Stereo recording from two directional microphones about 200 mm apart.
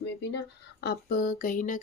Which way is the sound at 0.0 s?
55° left (ahead or behind).